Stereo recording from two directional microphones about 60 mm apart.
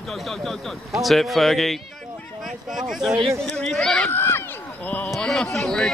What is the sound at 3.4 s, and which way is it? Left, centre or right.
Speech, centre.